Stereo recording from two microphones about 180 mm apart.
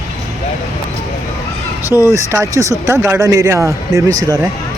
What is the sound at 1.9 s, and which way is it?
Speech, 15° right (ahead or behind).